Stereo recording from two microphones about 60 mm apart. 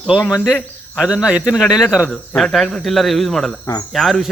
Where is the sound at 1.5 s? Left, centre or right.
Centre.